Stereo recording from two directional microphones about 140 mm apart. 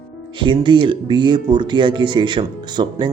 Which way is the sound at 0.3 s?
35° right (ahead or behind).